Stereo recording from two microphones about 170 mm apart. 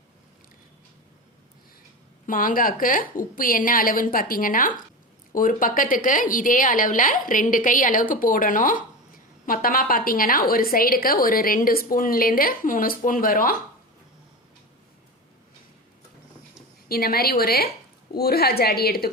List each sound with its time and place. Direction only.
2.2 s a woman's voice: 55° left (ahead or behind)
16.9 s a woman's voice: 65° left (ahead or behind)